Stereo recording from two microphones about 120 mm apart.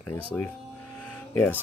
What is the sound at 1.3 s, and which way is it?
Speech, 15° left (ahead or behind).